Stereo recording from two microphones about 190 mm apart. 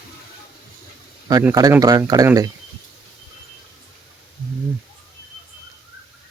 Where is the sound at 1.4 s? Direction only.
15° right (ahead or behind).